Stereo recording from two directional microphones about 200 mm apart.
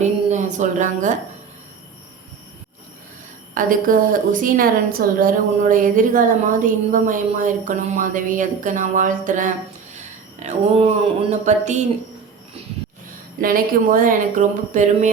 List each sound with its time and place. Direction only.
0.0 s a sound: 35° right (ahead or behind)
3.5 s a woman's voice: 45° right (ahead or behind)
13.4 s speech: 45° right (ahead or behind)